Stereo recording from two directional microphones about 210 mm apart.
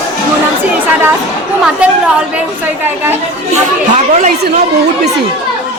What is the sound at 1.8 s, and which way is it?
A woman's voice, 5° right (ahead or behind).